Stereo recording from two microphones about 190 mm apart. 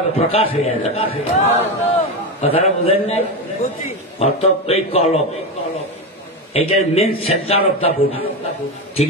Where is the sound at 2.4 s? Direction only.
30° left (ahead or behind).